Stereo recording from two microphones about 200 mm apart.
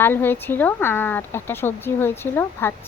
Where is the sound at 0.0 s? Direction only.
10° left (ahead or behind).